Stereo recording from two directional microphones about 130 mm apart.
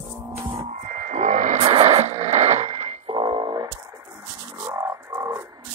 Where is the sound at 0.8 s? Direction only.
65° right (ahead or behind).